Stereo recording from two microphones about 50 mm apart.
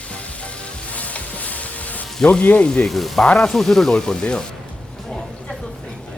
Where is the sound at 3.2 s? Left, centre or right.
Left.